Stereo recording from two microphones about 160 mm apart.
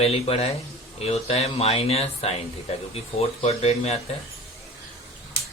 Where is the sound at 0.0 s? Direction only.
40° left (ahead or behind).